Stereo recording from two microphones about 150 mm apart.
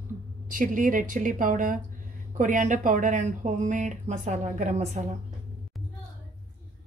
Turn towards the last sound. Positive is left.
turn(degrees=-50)  # may be behind; listen again after turning